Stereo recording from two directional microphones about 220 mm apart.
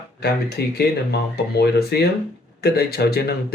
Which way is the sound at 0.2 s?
45° left (ahead or behind).